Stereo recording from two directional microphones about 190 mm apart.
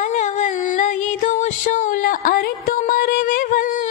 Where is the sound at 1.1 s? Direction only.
40° left (ahead or behind).